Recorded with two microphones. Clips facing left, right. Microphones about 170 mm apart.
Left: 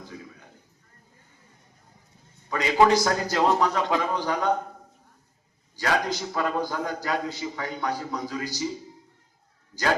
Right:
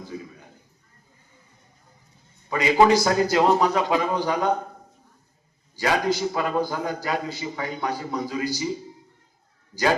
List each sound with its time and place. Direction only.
2.5 s a man's voice: 10° right (ahead or behind)
5.7 s a man's voice: 10° right (ahead or behind)